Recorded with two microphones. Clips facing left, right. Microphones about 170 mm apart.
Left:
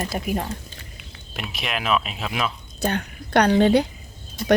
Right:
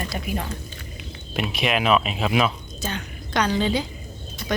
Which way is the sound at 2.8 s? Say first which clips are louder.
Left 6 dB; 60° left (ahead or behind).